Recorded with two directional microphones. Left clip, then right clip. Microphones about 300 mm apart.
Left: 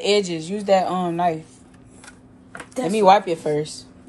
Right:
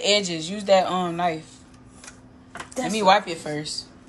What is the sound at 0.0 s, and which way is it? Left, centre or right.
A woman's voice, centre.